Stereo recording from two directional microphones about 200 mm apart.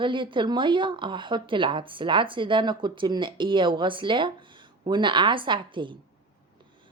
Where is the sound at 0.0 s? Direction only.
25° right (ahead or behind).